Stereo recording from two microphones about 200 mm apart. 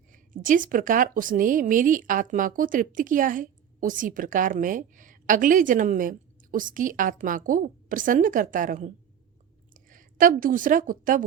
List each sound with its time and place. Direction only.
0.1 s a woman's voice: 40° right (ahead or behind)